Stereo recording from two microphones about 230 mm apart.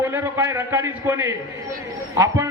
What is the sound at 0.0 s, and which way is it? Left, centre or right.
A man's voice, centre.